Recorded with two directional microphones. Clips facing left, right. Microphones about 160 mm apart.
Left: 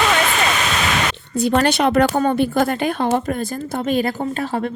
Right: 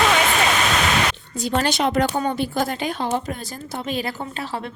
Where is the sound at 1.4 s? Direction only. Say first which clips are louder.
Left 5 dB; 60° left (ahead or behind).